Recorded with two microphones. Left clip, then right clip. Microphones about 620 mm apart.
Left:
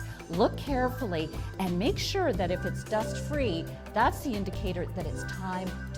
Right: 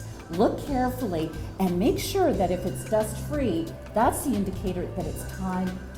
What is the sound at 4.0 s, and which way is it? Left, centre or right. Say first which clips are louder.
Speech: right 3 dB; left.